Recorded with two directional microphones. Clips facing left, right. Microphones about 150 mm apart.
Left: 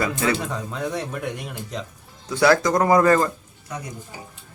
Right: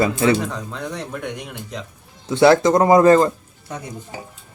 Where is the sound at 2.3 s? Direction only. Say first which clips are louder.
Right 5 dB; 25° right (ahead or behind).